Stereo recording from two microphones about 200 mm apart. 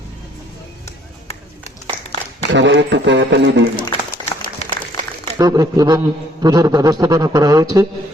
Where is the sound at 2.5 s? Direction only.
60° right (ahead or behind).